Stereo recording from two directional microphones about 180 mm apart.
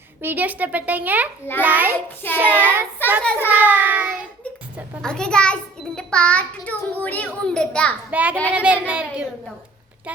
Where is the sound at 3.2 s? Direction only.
5° left (ahead or behind).